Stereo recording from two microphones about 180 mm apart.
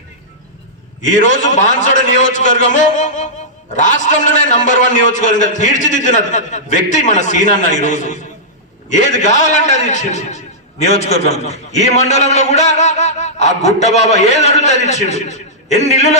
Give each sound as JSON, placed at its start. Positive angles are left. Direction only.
{"t": 1.0, "sound": "a man's voice", "side_deg": 45}